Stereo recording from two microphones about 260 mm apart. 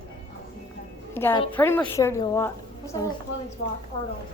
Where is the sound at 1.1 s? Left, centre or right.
Centre.